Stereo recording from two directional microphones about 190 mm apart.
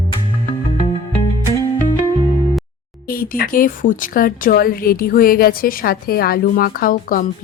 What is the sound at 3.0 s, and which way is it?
Speech, 50° left (ahead or behind).